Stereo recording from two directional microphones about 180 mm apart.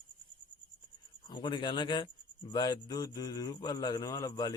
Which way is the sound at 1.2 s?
25° left (ahead or behind).